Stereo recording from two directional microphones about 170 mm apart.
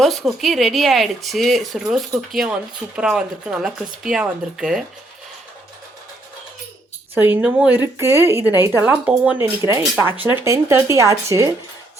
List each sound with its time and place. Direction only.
0.0 s speech: centre (ahead or behind)
7.2 s speech: 10° right (ahead or behind)